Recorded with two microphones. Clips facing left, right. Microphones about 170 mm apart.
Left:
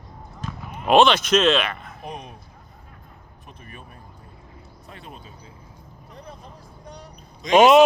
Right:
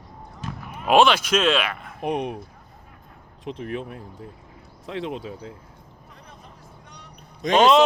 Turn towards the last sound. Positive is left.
turn(degrees=10)  # may be behind; listen again after turning